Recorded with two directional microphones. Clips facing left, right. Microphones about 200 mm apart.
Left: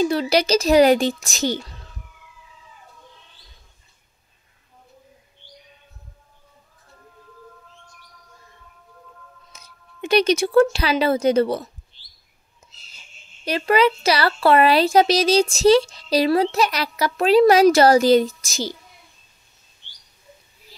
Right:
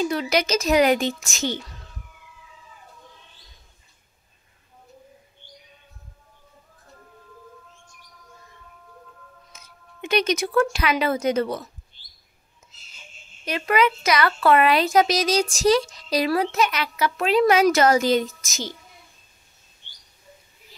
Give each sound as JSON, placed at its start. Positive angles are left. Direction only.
{"t": 0.0, "sound": "speech", "side_deg": 30}
{"t": 9.5, "sound": "speech", "side_deg": 35}
{"t": 13.5, "sound": "speech", "side_deg": 35}